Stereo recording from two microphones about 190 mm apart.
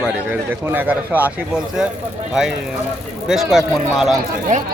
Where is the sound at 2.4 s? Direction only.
5° right (ahead or behind).